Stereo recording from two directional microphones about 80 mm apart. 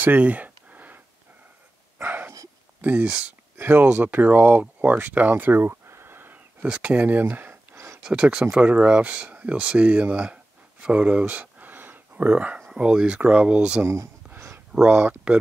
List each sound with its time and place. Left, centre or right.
0.0 s a sound: right
2.0 s dog: right
2.8 s speech: right
7.7 s a sound: right
8.0 s speech: centre
14.9 s speech: centre